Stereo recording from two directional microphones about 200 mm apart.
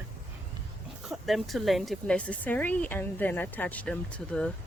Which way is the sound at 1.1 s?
Centre (ahead or behind).